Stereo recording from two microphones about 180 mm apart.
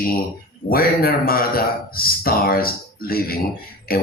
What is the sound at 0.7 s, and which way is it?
A man's voice, 55° left (ahead or behind).